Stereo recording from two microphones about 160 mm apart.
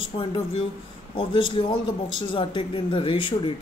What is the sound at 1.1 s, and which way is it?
A man's voice, 30° left (ahead or behind).